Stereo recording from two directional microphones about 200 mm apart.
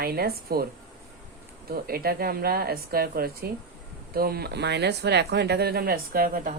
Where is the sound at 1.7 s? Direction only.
50° right (ahead or behind).